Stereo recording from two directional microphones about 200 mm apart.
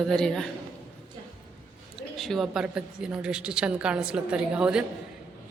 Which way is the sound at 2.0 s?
Centre (ahead or behind).